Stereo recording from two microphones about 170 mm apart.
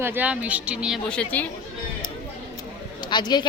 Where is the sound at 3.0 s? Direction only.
25° left (ahead or behind).